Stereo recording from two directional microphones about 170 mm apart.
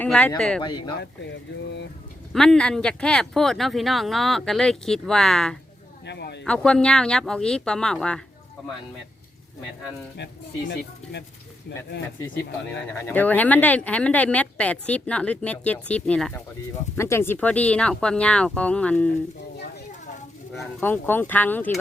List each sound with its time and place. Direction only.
0.0 s speech: 10° left (ahead or behind)
0.9 s speech: 90° left
2.3 s speech: 5° left (ahead or behind)
6.1 s speech: 85° left
6.4 s speech: 5° left (ahead or behind)
11.0 s speech: 5° left (ahead or behind)
12.9 s speech: 10° left (ahead or behind)
20.8 s speech: 10° left (ahead or behind)